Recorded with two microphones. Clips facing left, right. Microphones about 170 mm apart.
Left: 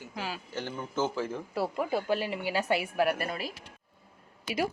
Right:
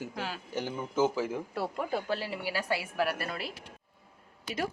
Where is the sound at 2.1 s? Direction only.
15° left (ahead or behind).